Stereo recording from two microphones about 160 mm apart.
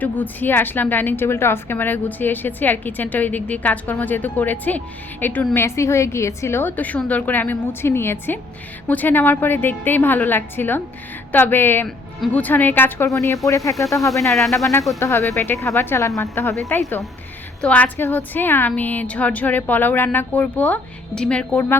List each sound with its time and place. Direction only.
0.0 s a woman's voice: 10° left (ahead or behind)
14.1 s speech: centre (ahead or behind)
14.9 s a woman's voice: 15° left (ahead or behind)
17.6 s a woman's voice: 10° left (ahead or behind)